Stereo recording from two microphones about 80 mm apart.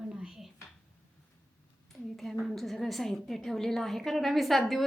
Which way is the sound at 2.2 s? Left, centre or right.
Centre.